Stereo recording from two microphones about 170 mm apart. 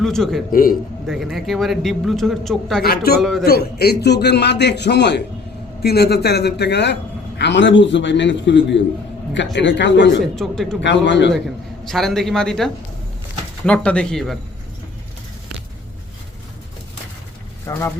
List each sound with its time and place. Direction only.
0.0 s a man's voice: centre (ahead or behind)
0.5 s a man's voice: 55° left (ahead or behind)
1.0 s a man's voice: centre (ahead or behind)
2.8 s a man's voice: 65° left (ahead or behind)
3.2 s a man's voice: centre (ahead or behind)
3.4 s a man's voice: 70° left (ahead or behind)
5.8 s a man's voice: 70° left (ahead or behind); by 10.2 s 90° left
10.3 s a man's voice: centre (ahead or behind)
10.8 s a man's voice: 90° left
11.9 s a man's voice: centre (ahead or behind)
17.7 s speech: 15° left (ahead or behind)